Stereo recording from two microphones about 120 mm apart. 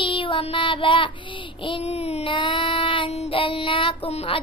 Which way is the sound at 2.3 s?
45° left (ahead or behind).